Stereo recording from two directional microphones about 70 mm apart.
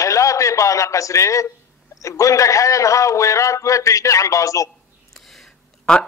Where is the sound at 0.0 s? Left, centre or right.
Left.